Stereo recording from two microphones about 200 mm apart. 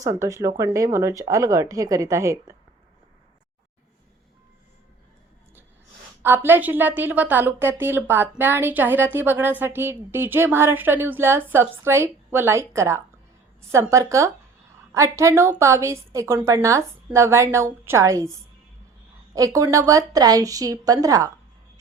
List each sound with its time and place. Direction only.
0.0 s a woman's voice: 15° right (ahead or behind)
6.2 s a woman's voice: 10° right (ahead or behind)